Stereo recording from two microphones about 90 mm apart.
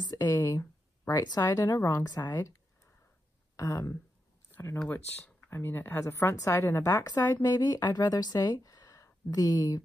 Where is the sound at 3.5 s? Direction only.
40° left (ahead or behind).